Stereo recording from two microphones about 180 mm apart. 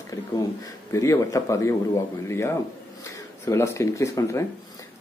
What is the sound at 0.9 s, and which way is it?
Speech, 15° left (ahead or behind).